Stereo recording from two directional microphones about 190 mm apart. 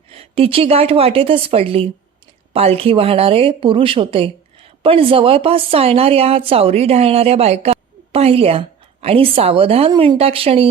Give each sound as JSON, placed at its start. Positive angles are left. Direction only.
{"t": 0.1, "sound": "a woman's voice", "side_deg": -30}